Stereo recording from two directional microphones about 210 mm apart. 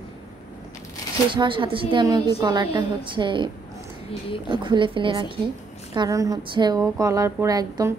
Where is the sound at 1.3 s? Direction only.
25° right (ahead or behind).